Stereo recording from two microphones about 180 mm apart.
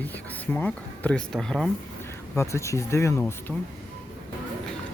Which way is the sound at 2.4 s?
15° left (ahead or behind).